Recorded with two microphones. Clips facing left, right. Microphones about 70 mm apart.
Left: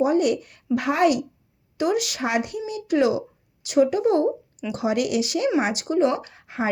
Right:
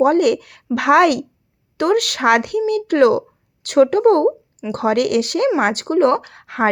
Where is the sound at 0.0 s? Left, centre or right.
Right.